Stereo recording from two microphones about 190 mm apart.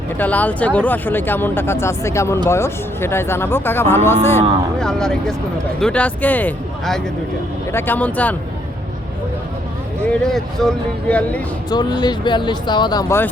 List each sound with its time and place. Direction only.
0.2 s speech: 10° left (ahead or behind)
10.1 s speech: centre (ahead or behind)
11.7 s speech: 20° left (ahead or behind)